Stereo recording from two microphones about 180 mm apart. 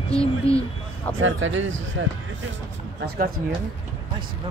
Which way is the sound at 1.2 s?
90° right.